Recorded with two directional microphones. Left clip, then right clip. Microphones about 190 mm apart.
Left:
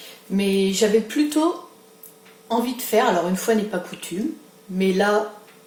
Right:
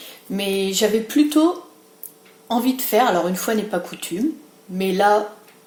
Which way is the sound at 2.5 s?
55° right (ahead or behind).